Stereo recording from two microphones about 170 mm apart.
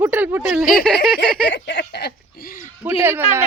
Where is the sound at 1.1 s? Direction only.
90° left; by 2.6 s 60° left (ahead or behind).